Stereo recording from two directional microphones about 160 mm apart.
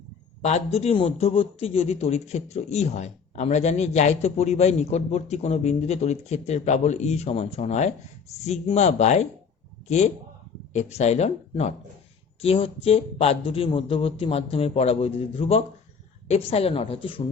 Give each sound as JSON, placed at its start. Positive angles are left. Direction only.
{"t": 0.4, "sound": "a man's voice", "side_deg": 40}